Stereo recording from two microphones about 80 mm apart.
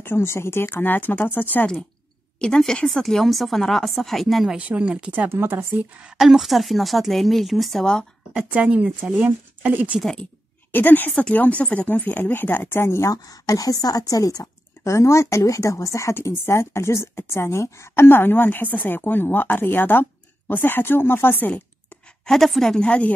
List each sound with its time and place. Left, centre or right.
0.0 s speech: left
2.4 s speech: centre
4.6 s speech: centre
5.3 s speech: right
6.0 s speech: centre
8.3 s speech: centre
10.7 s speech: left
13.1 s speech: left
22.2 s speech: centre